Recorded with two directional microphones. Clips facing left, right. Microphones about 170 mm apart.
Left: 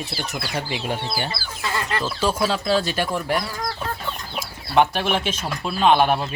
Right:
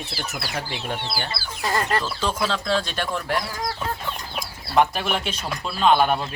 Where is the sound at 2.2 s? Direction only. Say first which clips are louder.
Left 3 dB; 10° left (ahead or behind).